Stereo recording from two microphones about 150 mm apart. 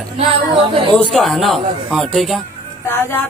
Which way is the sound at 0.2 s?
35° right (ahead or behind).